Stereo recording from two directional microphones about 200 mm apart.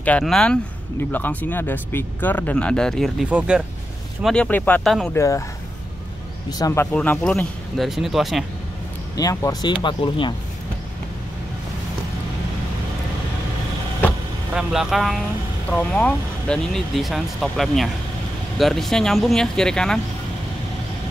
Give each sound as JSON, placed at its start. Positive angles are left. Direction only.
{"t": 0.0, "sound": "speech", "side_deg": 5}
{"t": 6.6, "sound": "speech", "side_deg": 15}
{"t": 9.1, "sound": "speech", "side_deg": 15}
{"t": 14.5, "sound": "speech", "side_deg": -5}